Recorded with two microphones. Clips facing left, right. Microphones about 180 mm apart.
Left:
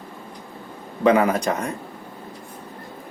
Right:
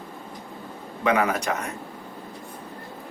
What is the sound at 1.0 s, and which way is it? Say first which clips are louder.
Speech: left 5 dB; 30° left (ahead or behind).